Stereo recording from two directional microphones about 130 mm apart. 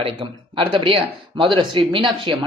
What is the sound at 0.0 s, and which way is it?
Speech, 40° right (ahead or behind).